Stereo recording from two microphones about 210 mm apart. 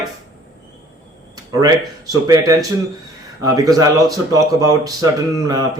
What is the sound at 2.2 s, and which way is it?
Speech, 15° right (ahead or behind).